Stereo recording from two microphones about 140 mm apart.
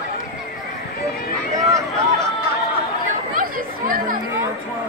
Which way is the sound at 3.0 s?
80° right.